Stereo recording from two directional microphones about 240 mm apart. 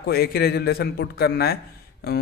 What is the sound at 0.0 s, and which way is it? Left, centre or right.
A man's voice, left.